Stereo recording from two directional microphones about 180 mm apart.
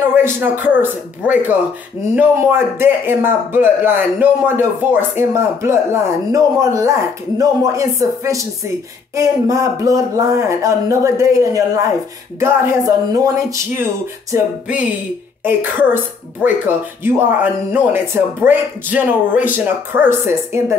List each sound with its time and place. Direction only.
0.1 s speech: 10° right (ahead or behind)
14.3 s speech: 5° right (ahead or behind)